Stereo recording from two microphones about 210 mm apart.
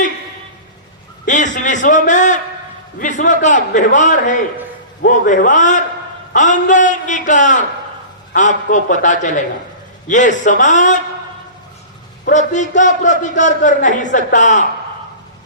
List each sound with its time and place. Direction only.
1.5 s a man's voice: 35° left (ahead or behind)
12.2 s a man's voice: 35° left (ahead or behind)